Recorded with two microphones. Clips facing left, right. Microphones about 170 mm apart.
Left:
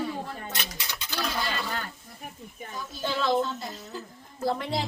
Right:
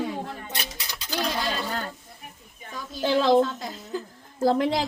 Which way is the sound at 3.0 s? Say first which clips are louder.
Right 6 dB; 90° right.